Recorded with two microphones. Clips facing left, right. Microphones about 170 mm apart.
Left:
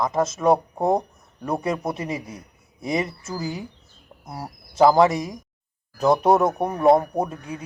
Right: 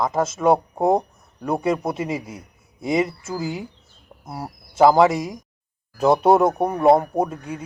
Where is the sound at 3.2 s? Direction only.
25° right (ahead or behind).